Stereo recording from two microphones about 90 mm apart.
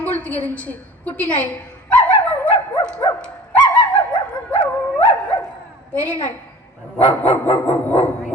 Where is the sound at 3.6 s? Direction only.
55° left (ahead or behind).